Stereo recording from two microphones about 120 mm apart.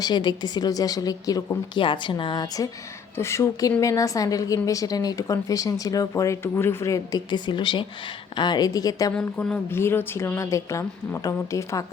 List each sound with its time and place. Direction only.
0.0 s a woman's voice: 40° left (ahead or behind)
3.2 s a woman's voice: 20° left (ahead or behind)
7.3 s a woman's voice: 40° left (ahead or behind)
9.1 s speech: 5° left (ahead or behind)
9.6 s a woman's voice: 20° left (ahead or behind)